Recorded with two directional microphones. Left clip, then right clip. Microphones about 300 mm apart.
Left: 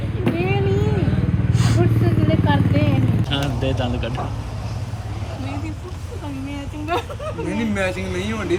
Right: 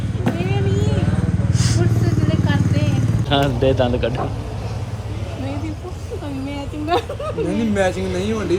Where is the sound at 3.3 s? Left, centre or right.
Centre.